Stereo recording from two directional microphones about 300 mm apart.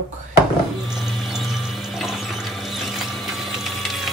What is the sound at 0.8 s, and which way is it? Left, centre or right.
Water, centre.